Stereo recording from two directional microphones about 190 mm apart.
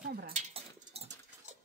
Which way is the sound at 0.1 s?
50° right (ahead or behind).